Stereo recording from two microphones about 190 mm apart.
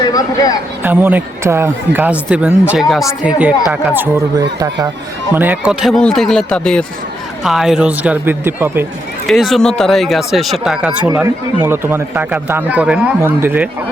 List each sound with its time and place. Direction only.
0.0 s speech: 20° left (ahead or behind)
0.8 s speech: 10° right (ahead or behind)
9.2 s speech: centre (ahead or behind)